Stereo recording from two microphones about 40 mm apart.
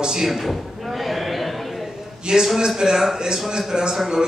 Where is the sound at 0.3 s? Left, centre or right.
Centre.